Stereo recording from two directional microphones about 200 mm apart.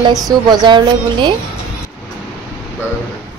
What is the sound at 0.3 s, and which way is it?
A woman's voice, 20° right (ahead or behind).